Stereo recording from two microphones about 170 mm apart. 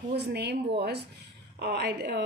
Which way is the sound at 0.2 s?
75° right (ahead or behind).